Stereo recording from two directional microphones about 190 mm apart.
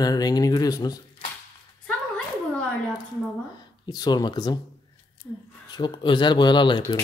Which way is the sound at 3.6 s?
20° left (ahead or behind).